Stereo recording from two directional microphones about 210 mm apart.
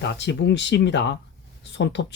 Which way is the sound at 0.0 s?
55° left (ahead or behind).